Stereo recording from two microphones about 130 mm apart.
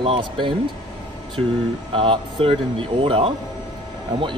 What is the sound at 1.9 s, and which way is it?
Speech, 45° right (ahead or behind).